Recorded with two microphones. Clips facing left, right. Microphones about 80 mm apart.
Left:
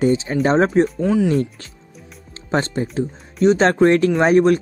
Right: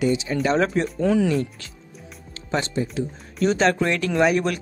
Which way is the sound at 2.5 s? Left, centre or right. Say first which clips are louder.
Left 4 dB; left.